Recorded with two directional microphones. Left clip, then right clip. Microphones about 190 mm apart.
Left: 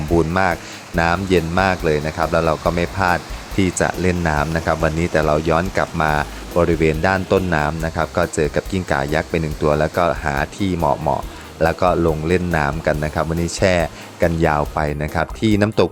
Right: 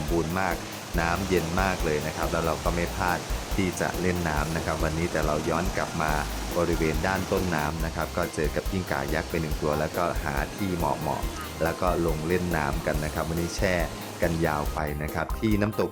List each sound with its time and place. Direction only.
0.9 s speech: 40° left (ahead or behind)